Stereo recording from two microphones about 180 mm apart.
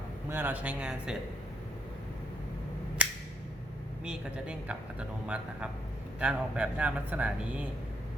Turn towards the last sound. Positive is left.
turn(degrees=-5)  # may be behind; listen again after turning